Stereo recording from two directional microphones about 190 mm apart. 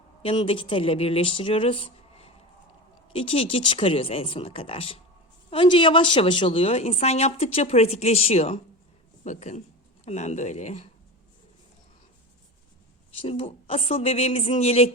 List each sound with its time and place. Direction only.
0.2 s a woman's voice: 30° left (ahead or behind)
13.1 s a woman's voice: 30° left (ahead or behind)